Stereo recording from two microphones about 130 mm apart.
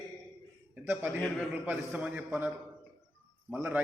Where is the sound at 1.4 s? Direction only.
10° right (ahead or behind).